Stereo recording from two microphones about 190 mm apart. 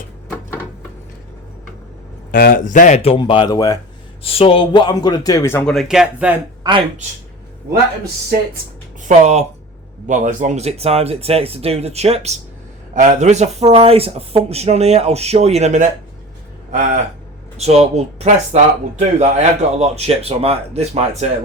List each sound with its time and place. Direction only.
2.3 s speech: 50° left (ahead or behind); by 3.8 s 20° left (ahead or behind)
4.2 s a man's voice: 30° left (ahead or behind); by 5.7 s 10° left (ahead or behind)
5.7 s speech: centre (ahead or behind)
6.6 s speech: 25° right (ahead or behind)
9.0 s speech: 35° right (ahead or behind)
17.6 s speech: 35° right (ahead or behind)